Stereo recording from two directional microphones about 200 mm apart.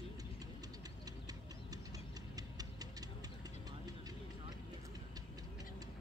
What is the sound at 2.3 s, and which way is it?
Clock, 20° right (ahead or behind).